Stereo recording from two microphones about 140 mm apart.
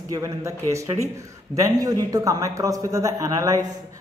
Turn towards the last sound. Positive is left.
turn(degrees=-25)  # may be behind; listen again after turning